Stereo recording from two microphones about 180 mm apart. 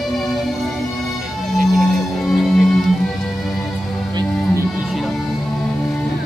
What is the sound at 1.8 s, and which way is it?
Music, centre (ahead or behind).